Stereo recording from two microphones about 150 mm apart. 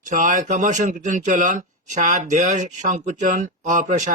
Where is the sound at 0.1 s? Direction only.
60° right (ahead or behind).